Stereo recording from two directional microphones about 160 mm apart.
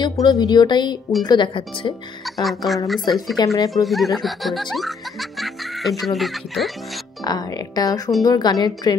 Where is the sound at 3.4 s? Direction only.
25° left (ahead or behind).